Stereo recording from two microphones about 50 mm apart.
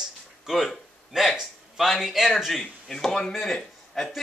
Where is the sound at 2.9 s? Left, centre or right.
Centre.